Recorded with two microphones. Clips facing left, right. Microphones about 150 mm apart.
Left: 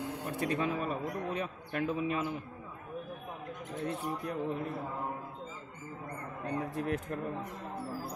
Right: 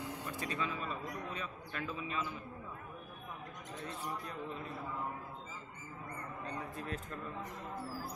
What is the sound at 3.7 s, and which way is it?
Speech, 55° left (ahead or behind).